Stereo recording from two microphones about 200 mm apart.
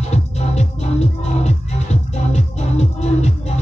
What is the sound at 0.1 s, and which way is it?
Music, 35° left (ahead or behind).